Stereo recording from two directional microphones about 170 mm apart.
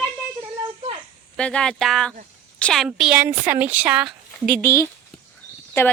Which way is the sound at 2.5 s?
5° left (ahead or behind).